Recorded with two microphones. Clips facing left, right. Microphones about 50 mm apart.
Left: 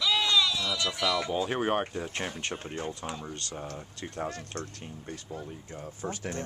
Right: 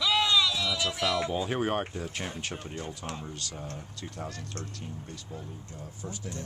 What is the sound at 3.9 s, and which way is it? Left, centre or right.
Speech, left.